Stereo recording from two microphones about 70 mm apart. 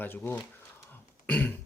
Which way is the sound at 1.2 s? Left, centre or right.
Left.